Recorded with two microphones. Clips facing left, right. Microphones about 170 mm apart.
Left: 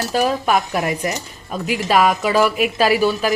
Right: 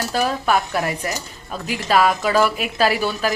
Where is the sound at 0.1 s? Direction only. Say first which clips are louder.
Left 2 dB; 10° left (ahead or behind).